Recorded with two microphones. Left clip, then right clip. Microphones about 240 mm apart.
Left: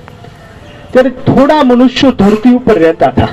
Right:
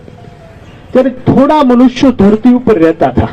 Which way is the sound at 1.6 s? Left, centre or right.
Left.